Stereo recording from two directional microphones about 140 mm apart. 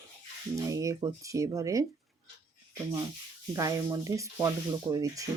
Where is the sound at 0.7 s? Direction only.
25° right (ahead or behind).